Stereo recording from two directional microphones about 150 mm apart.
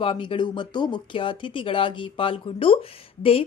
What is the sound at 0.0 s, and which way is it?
Speech, 35° left (ahead or behind).